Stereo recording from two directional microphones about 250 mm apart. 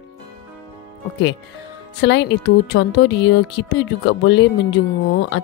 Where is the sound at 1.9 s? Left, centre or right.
Left.